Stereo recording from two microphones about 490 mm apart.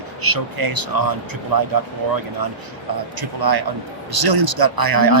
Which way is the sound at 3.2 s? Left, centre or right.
Right.